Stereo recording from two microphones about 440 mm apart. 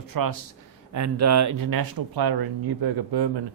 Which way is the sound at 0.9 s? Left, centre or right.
Right.